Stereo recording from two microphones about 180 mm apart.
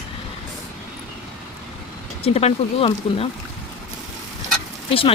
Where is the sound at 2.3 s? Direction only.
35° left (ahead or behind).